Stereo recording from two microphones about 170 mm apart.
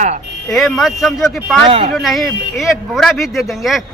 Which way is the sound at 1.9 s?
Centre (ahead or behind).